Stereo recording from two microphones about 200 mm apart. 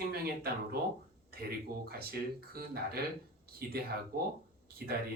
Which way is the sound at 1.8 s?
50° right (ahead or behind).